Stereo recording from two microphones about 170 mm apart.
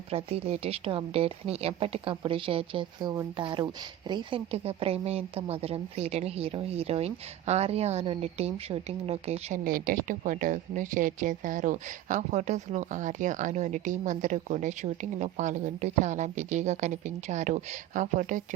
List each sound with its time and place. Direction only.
0.1 s a woman's voice: 35° right (ahead or behind)
9.6 s speech: 55° right (ahead or behind)